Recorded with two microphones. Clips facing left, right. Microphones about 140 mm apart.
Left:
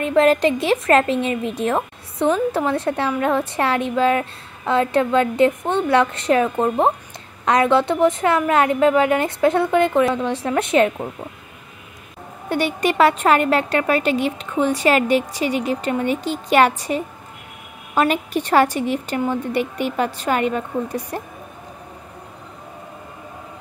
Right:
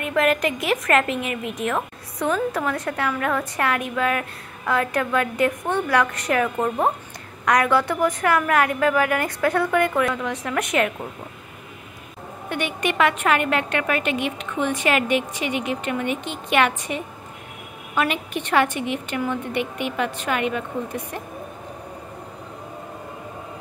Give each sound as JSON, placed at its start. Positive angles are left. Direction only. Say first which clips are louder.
{"t": 0.0, "sound": "a woman's voice", "louder": "left 5 dB", "side_deg": 30}
{"t": 12.4, "sound": "a woman's voice", "louder": "left 5 dB", "side_deg": 35}